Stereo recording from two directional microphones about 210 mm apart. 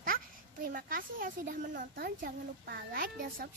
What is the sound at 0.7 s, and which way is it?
A woman's voice, 40° right (ahead or behind).